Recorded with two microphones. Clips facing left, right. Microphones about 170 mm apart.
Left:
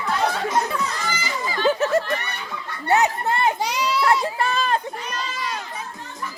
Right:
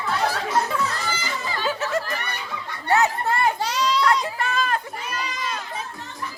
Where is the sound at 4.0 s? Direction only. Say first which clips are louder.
Left 2 dB; 25° left (ahead or behind).